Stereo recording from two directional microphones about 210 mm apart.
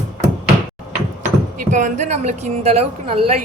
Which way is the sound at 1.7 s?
35° right (ahead or behind).